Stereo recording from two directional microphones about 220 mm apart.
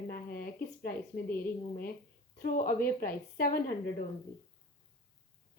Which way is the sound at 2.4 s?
40° left (ahead or behind).